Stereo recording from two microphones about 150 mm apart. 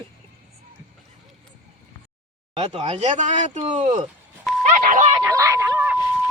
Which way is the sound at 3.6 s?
35° right (ahead or behind).